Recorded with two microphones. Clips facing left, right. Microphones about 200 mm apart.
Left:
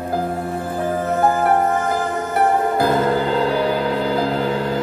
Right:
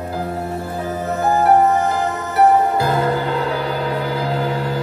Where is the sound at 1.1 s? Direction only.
50° left (ahead or behind).